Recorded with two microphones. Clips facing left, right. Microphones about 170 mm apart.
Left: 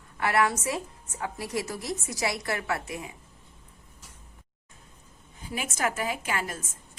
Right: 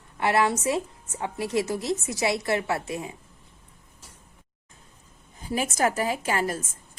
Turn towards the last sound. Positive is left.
turn(degrees=-35)  # may be behind; listen again after turning